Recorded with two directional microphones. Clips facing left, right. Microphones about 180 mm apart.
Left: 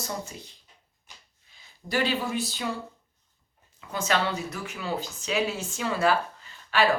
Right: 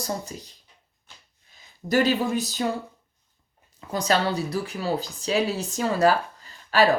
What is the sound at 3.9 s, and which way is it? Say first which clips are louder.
Speech: right 4 dB; 35° right (ahead or behind).